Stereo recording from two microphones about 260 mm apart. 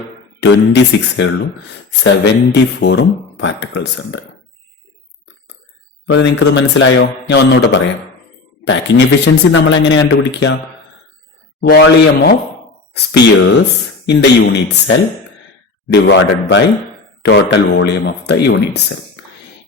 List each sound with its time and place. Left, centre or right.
0.3 s speech: left
6.1 s speech: left
11.7 s speech: left